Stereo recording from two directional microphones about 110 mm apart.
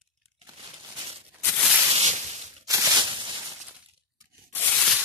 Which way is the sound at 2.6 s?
30° right (ahead or behind).